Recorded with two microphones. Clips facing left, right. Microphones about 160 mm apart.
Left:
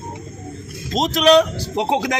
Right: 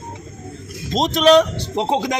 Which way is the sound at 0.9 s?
Centre (ahead or behind).